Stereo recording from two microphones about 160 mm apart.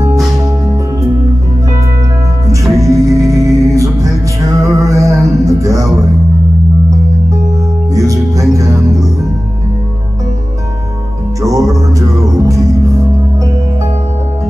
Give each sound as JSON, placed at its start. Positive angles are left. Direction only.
{"t": 2.5, "sound": "music", "side_deg": -20}
{"t": 7.9, "sound": "music", "side_deg": -20}
{"t": 11.4, "sound": "music", "side_deg": -20}